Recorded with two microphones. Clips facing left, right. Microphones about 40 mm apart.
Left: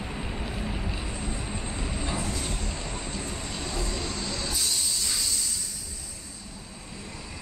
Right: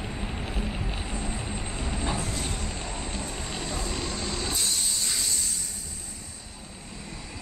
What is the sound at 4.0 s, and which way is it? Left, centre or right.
Vehicle, centre.